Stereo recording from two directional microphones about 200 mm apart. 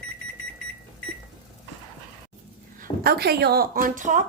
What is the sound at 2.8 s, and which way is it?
Speech, 50° right (ahead or behind).